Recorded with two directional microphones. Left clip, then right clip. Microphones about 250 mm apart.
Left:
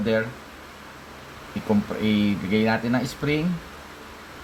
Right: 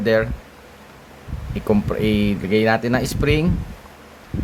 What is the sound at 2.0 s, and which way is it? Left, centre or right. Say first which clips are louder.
Speech: right 4 dB; right.